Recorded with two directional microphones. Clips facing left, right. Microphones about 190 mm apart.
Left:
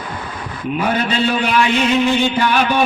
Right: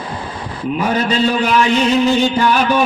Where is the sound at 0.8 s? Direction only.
40° right (ahead or behind).